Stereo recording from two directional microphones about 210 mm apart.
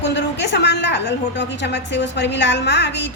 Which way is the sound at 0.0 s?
55° left (ahead or behind).